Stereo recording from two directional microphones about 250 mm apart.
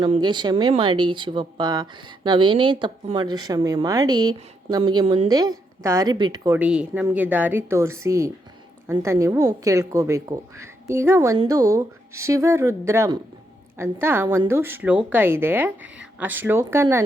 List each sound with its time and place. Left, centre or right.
0.0 s speech: centre